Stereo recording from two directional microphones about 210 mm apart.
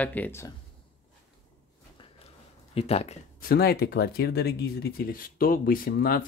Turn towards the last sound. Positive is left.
turn(degrees=45)  # may be behind; listen again after turning